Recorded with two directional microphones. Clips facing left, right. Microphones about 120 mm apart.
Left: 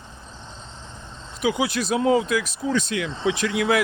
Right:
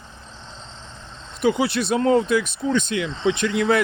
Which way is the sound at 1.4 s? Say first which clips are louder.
Right 3 dB; centre (ahead or behind).